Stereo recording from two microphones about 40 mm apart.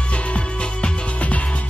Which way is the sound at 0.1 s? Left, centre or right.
Left.